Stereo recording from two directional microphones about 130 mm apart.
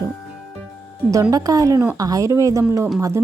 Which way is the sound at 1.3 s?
30° right (ahead or behind).